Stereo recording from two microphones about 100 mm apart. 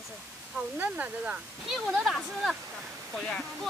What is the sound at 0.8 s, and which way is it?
Speech, 15° right (ahead or behind).